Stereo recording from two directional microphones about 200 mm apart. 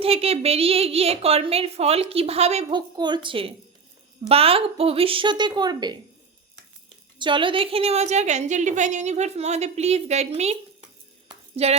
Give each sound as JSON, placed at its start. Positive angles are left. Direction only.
{"t": 0.0, "sound": "a woman's voice", "side_deg": -30}
{"t": 2.6, "sound": "speech", "side_deg": -20}
{"t": 7.2, "sound": "a woman's voice", "side_deg": -25}
{"t": 11.3, "sound": "a sound", "side_deg": -30}